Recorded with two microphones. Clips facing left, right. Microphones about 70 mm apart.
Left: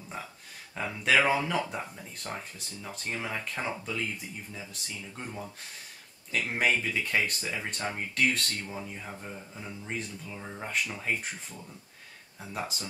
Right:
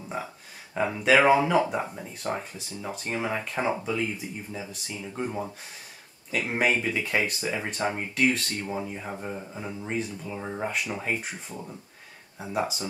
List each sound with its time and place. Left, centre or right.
0.7 s speech: centre
1.1 s speech: centre
8.6 s speech: centre
12.4 s speech: centre